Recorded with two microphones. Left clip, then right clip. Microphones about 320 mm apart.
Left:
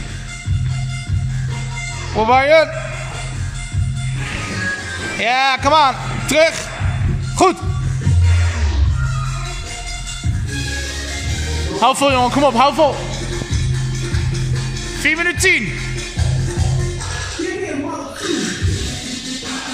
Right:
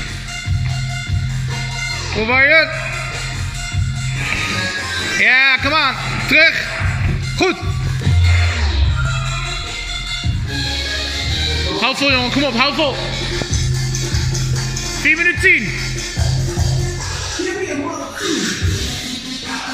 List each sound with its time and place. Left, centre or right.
2.2 s speech: centre
5.2 s speech: centre
11.8 s speech: left
15.0 s speech: centre